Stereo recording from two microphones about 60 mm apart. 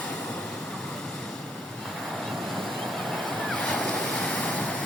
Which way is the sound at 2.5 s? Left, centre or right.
Centre.